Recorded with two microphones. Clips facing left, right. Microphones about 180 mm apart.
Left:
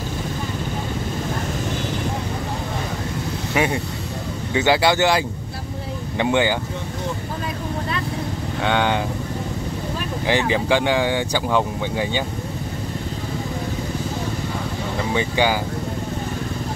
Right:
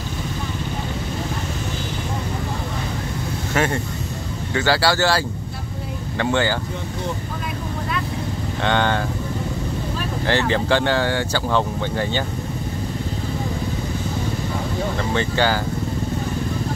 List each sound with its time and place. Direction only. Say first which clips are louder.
3.5 s speech: even; 15° left (ahead or behind)
8.6 s speech: even; 10° left (ahead or behind)
10.2 s speech: even; 10° left (ahead or behind)
15.1 s speech: left 1 dB; 15° left (ahead or behind)